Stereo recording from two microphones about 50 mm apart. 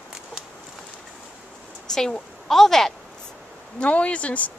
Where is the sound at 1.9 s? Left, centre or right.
Centre.